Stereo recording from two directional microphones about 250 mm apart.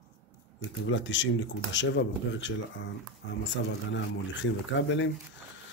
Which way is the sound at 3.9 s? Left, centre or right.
Left.